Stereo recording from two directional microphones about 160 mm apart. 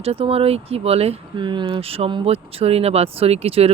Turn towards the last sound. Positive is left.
turn(degrees=-40)  # may be behind; listen again after turning